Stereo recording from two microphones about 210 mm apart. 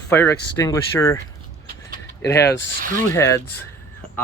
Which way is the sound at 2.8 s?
40° right (ahead or behind).